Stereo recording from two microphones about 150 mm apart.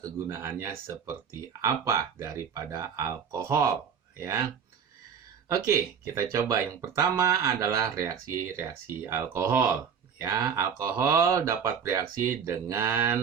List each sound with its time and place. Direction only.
0.0 s speech: 20° right (ahead or behind)
5.5 s speech: 20° right (ahead or behind)